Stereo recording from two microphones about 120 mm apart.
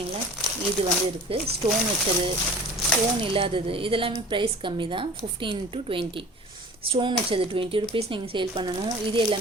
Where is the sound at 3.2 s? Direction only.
45° right (ahead or behind).